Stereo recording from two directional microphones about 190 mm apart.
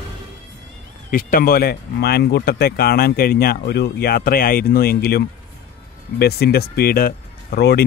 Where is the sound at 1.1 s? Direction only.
50° left (ahead or behind).